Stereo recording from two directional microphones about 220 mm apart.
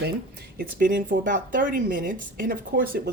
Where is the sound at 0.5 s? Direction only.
45° right (ahead or behind).